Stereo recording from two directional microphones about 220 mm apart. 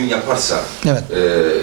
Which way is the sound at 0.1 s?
20° right (ahead or behind).